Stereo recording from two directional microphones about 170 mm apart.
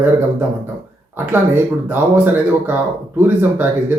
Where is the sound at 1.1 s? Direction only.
10° right (ahead or behind).